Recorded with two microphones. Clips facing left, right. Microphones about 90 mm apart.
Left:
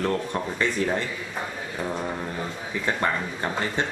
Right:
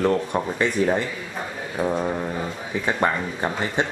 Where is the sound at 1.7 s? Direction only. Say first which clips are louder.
Right 7 dB; 20° right (ahead or behind).